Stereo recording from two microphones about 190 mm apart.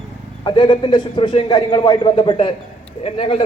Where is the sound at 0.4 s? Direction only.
25° left (ahead or behind).